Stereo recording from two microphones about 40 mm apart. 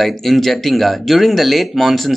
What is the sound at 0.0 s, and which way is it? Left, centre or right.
Speech, centre.